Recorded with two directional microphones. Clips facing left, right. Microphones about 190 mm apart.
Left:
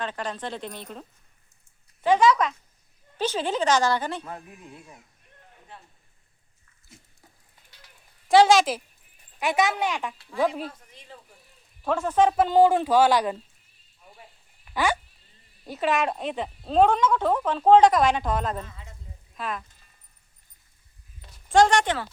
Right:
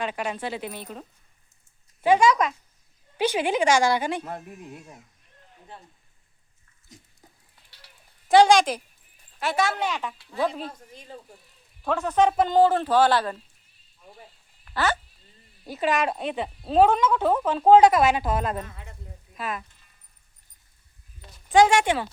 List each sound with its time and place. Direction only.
0.0 s a woman's voice: 10° right (ahead or behind)
8.3 s speech: centre (ahead or behind)
9.4 s speech: 15° left (ahead or behind)
10.7 s speech: 40° right (ahead or behind)
11.8 s speech: 10° left (ahead or behind)
14.6 s a sound: 10° left (ahead or behind)
15.6 s a woman's voice: centre (ahead or behind)
18.6 s speech: 60° right (ahead or behind)
19.4 s speech: 5° right (ahead or behind)
21.5 s a woman's voice: 5° right (ahead or behind)